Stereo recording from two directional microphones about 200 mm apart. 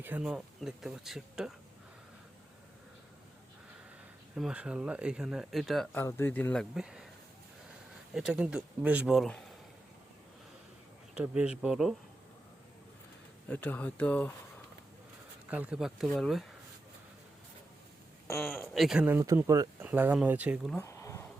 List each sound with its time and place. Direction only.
0.0 s speech: 5° right (ahead or behind)
4.4 s speech: 5° right (ahead or behind)
8.1 s speech: 5° right (ahead or behind)
11.1 s speech: 5° right (ahead or behind)
13.5 s speech: 10° left (ahead or behind)
15.4 s speech: 5° right (ahead or behind)
18.3 s speech: 10° left (ahead or behind)
18.7 s speech: centre (ahead or behind)
20.7 s a sound: 15° left (ahead or behind)